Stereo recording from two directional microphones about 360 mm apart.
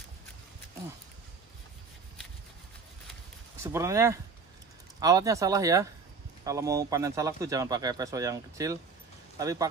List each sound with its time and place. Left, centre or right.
3.6 s speech: centre